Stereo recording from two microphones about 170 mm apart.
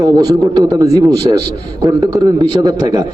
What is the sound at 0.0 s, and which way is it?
A man's voice, 20° right (ahead or behind).